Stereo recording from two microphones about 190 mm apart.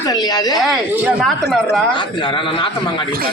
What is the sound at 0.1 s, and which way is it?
Speech, 20° left (ahead or behind).